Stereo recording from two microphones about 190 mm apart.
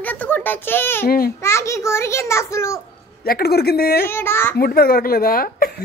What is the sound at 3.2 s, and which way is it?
Speech, 55° left (ahead or behind).